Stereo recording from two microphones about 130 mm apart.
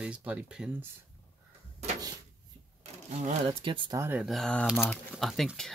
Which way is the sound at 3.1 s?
60° right (ahead or behind).